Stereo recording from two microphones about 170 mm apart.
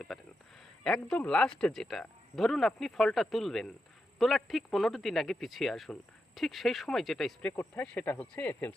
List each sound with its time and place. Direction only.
0.1 s speech: centre (ahead or behind)